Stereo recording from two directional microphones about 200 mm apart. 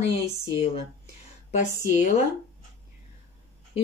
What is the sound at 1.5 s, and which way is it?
Speech, 40° left (ahead or behind).